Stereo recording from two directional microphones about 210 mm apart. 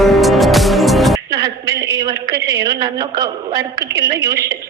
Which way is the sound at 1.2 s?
15° right (ahead or behind).